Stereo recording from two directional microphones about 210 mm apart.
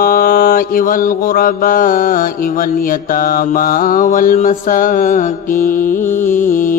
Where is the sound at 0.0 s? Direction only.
45° left (ahead or behind).